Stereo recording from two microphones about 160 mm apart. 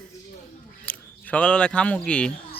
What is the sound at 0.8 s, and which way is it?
Speech, 10° left (ahead or behind).